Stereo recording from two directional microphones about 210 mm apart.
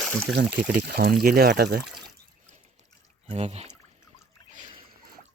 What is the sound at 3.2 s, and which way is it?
Speech, 30° right (ahead or behind).